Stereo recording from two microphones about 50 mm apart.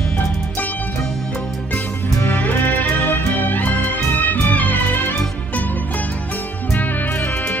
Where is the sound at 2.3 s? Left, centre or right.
Left.